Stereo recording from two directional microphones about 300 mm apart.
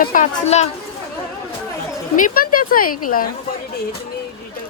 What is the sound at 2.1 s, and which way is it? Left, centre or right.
Speech, left.